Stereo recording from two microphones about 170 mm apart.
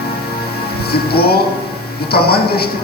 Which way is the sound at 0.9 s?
65° left (ahead or behind).